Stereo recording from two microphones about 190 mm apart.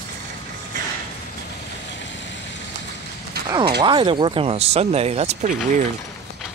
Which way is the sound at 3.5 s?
25° right (ahead or behind).